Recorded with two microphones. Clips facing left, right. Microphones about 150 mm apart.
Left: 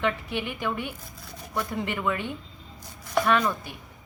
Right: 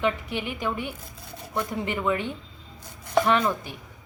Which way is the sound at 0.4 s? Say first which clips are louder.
Right 3 dB; 15° right (ahead or behind).